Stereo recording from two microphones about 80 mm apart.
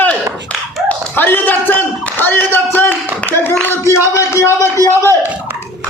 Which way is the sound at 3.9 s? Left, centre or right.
Left.